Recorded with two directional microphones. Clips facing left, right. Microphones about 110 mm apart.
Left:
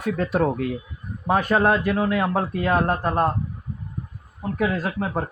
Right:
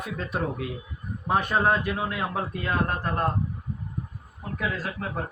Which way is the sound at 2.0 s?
55° left (ahead or behind).